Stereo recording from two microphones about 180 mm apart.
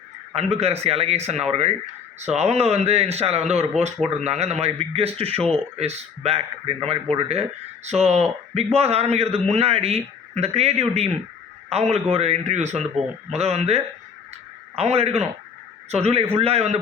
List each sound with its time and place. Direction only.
0.3 s a man's voice: 35° right (ahead or behind)